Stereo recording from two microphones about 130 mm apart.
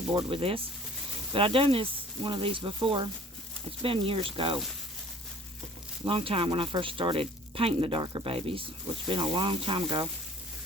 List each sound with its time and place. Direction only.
0.1 s speech: 40° right (ahead or behind)
6.1 s speech: 45° right (ahead or behind)